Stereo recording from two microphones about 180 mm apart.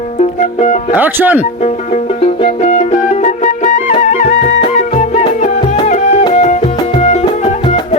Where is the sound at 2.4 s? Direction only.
40° left (ahead or behind).